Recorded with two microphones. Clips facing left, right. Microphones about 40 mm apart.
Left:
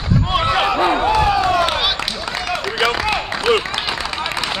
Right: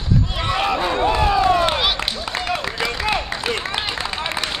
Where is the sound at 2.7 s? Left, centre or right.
Left.